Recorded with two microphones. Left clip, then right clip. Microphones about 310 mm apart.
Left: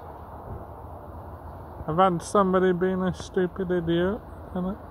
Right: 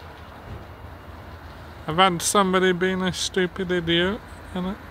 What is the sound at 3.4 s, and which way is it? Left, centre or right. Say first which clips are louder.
Speech: even; right.